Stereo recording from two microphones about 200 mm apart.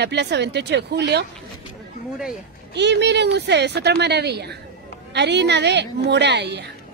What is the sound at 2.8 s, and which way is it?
A woman's voice, 60° right (ahead or behind).